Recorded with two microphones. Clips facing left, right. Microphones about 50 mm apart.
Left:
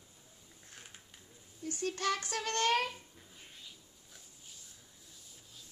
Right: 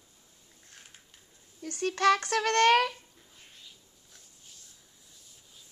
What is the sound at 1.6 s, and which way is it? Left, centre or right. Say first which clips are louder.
Speech: right 9 dB; right.